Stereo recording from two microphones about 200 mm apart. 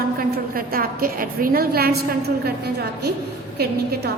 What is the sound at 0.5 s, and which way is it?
A woman's voice, 45° right (ahead or behind).